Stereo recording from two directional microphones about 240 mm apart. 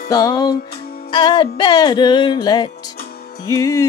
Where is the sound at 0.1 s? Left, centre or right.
Centre.